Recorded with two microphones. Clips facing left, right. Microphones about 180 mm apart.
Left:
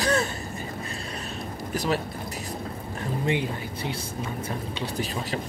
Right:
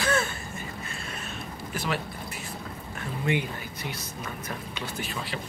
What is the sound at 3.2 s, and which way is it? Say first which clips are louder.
Speech: even; 30° left (ahead or behind).